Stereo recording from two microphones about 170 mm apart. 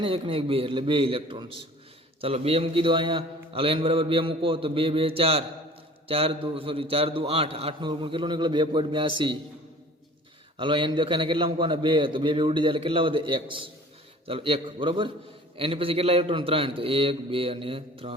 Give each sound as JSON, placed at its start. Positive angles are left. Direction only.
{"t": 0.0, "sound": "a man's voice", "side_deg": -35}
{"t": 10.6, "sound": "a man's voice", "side_deg": -30}